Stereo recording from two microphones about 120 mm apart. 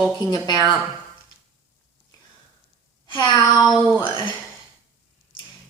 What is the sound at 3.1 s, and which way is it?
Speech, 30° left (ahead or behind).